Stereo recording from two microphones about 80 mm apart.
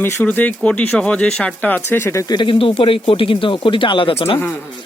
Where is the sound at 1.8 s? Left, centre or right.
Left.